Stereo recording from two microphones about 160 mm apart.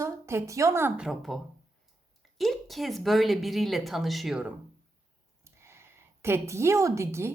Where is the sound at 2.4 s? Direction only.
Centre (ahead or behind).